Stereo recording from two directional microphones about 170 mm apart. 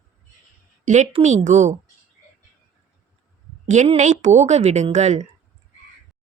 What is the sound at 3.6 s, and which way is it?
A woman's voice, 45° right (ahead or behind).